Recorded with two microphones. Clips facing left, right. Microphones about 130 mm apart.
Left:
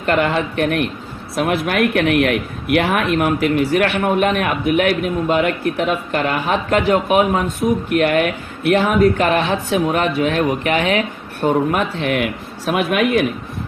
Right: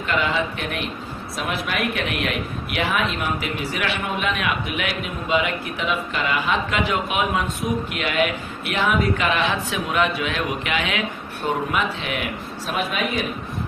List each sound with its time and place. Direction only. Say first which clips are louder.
0.0 s a man's voice: left 5 dB; 55° left (ahead or behind)
11.7 s speech: left 6 dB; 55° left (ahead or behind)